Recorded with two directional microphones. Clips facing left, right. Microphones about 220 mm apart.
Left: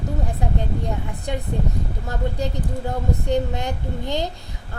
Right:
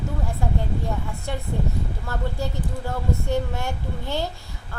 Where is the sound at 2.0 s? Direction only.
15° left (ahead or behind).